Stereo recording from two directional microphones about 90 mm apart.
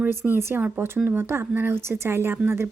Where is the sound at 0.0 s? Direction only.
25° right (ahead or behind).